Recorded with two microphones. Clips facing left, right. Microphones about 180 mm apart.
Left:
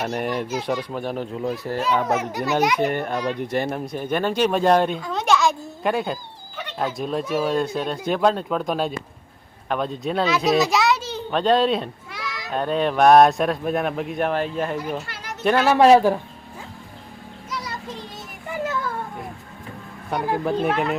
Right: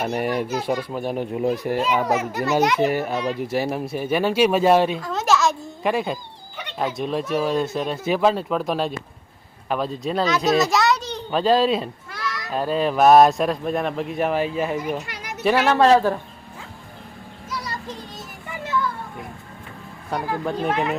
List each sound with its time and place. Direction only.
0.0 s a child's voice: 5° right (ahead or behind)
15.0 s children playing: 15° right (ahead or behind)
15.7 s a man's voice: 15° left (ahead or behind)
18.5 s a sound: 45° left (ahead or behind)
20.7 s a child's voice: 15° right (ahead or behind)